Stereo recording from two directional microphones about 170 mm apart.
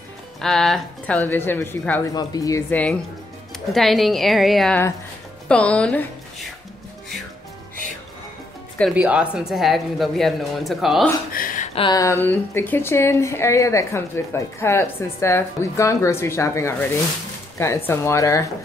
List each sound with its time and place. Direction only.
0.4 s a woman's voice: centre (ahead or behind); by 2.6 s 20° left (ahead or behind)
2.7 s a woman's voice: 5° left (ahead or behind)
8.9 s speech: 5° right (ahead or behind)
11.3 s a sound: 50° left (ahead or behind)
11.7 s a woman's voice: 25° left (ahead or behind)